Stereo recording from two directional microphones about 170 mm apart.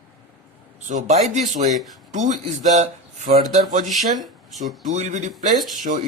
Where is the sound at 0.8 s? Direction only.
45° right (ahead or behind).